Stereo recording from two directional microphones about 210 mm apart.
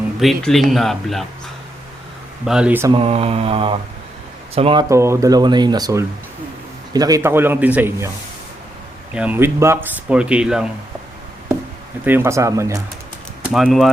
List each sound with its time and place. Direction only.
0.2 s speech: centre (ahead or behind)
2.5 s speech: 5° right (ahead or behind)
2.9 s mantra: 25° right (ahead or behind)
4.5 s speech: 25° right (ahead or behind)
9.1 s speech: 5° right (ahead or behind)
12.0 s speech: 10° right (ahead or behind)
13.5 s speech: centre (ahead or behind)